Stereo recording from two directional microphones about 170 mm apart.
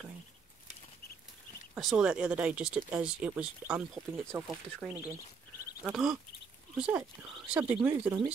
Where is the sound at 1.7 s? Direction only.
5° right (ahead or behind).